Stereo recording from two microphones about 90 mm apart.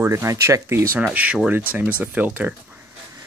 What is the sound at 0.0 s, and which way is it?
Speech, 35° right (ahead or behind).